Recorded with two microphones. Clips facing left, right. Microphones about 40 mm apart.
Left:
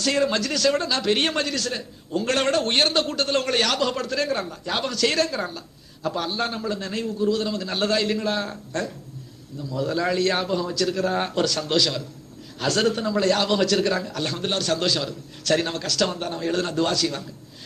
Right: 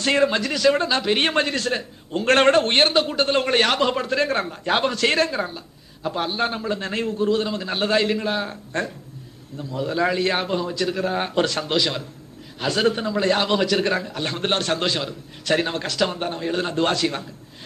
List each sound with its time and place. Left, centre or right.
0.0 s speech: right
0.3 s speech: centre
2.9 s a man's voice: centre
4.3 s speech: right; by 11.3 s centre
11.3 s a man's voice: right
11.6 s speech: right
14.3 s speech: right; by 16.7 s centre
16.7 s a man's voice: right